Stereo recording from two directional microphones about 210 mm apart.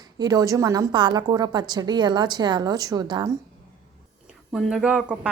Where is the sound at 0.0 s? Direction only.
20° right (ahead or behind).